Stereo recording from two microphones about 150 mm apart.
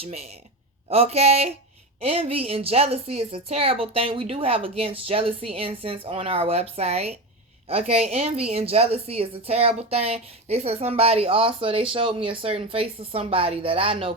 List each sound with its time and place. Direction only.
0.0 s a woman's voice: 45° right (ahead or behind)